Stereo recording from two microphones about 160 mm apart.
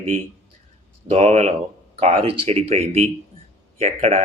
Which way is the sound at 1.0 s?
40° right (ahead or behind).